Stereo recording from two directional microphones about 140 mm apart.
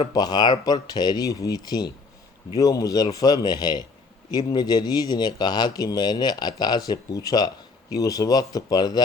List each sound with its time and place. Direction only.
0.1 s speech: 30° left (ahead or behind)